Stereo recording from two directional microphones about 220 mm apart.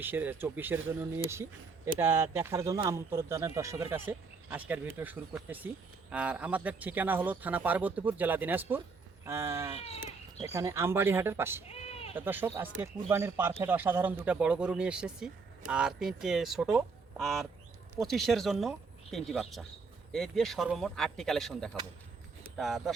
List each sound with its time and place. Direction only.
0.0 s speech: 10° right (ahead or behind)
9.8 s speech: 30° left (ahead or behind)
10.5 s speech: 15° right (ahead or behind)
11.7 s a sound: 25° left (ahead or behind)
12.1 s speech: 10° right (ahead or behind)